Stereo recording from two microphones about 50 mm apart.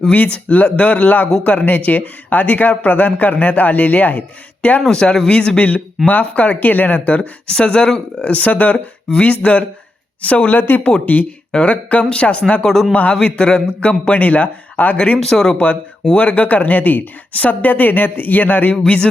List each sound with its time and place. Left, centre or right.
0.4 s a man's voice: left
4.9 s a man's voice: centre
6.1 s a man's voice: left
7.2 s a man's voice: centre; by 10.8 s left
10.8 s a man's voice: centre
11.0 s a man's voice: left
12.6 s a man's voice: centre
12.9 s a man's voice: left
15.2 s a man's voice: centre
15.5 s a man's voice: left
18.8 s a man's voice: left